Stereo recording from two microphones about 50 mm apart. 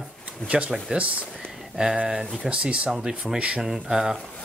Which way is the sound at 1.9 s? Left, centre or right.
Centre.